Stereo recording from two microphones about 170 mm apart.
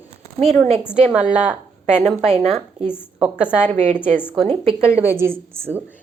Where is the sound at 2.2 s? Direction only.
40° right (ahead or behind).